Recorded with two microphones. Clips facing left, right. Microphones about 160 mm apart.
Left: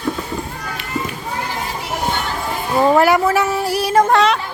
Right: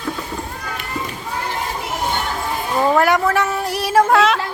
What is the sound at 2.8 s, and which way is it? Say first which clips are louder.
Speech: left 3 dB; 10° left (ahead or behind).